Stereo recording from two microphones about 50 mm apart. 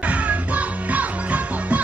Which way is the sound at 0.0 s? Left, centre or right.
Right.